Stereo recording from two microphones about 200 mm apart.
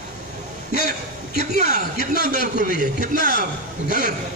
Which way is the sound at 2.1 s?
45° left (ahead or behind).